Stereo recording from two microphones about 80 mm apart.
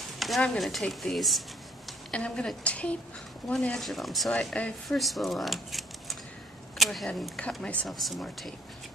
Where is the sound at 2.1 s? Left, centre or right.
Centre.